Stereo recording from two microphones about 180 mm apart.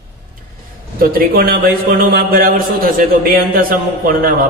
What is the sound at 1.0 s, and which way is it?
A man's voice, 55° right (ahead or behind).